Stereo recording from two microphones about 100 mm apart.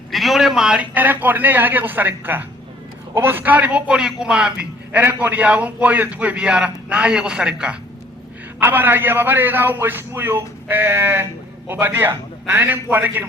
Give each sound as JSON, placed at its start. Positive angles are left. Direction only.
{"t": 0.1, "sound": "a man's voice", "side_deg": 0}
{"t": 8.6, "sound": "a man's voice", "side_deg": -20}